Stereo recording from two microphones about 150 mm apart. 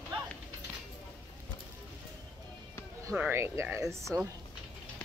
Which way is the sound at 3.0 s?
15° right (ahead or behind).